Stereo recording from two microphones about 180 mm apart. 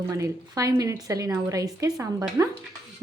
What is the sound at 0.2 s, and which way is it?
A woman's voice, 15° right (ahead or behind).